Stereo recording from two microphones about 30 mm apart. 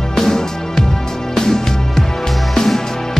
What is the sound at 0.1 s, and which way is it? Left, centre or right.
Music, centre.